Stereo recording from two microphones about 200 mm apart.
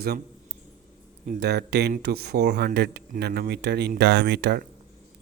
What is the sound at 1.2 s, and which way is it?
Speech, 50° right (ahead or behind).